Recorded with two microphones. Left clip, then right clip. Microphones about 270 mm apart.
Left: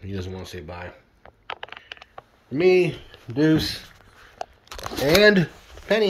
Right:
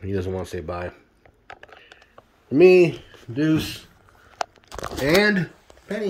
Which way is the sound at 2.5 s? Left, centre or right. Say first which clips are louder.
Right 5 dB; right.